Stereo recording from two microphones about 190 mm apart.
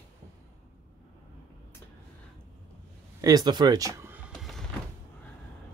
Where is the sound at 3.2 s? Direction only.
20° right (ahead or behind).